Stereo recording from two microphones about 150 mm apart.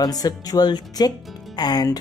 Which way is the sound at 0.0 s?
25° left (ahead or behind).